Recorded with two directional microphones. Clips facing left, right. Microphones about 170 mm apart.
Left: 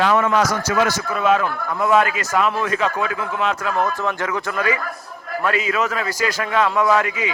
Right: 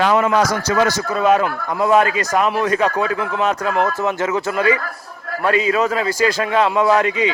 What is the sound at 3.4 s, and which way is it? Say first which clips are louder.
Speech: right 3 dB; 35° right (ahead or behind).